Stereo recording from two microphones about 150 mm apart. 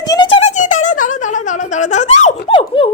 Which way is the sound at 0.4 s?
55° left (ahead or behind).